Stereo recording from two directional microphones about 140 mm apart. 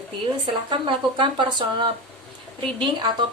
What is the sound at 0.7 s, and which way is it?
A woman's voice, 35° right (ahead or behind).